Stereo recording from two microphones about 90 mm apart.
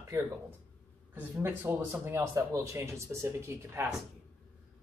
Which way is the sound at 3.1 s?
20° right (ahead or behind).